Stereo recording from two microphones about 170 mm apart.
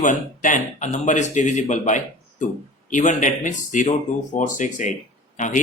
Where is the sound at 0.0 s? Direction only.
50° left (ahead or behind).